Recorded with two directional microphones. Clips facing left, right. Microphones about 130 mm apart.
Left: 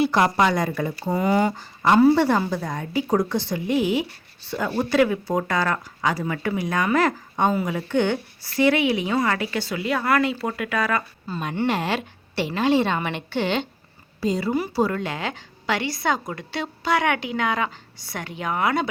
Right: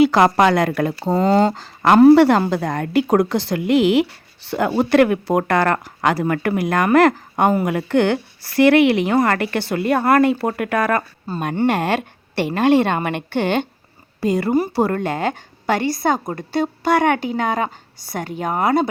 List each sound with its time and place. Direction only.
0.0 s a woman's voice: 90° right; by 18.9 s 40° right (ahead or behind)